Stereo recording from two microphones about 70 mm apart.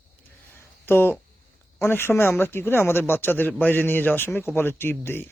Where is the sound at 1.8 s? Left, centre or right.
Left.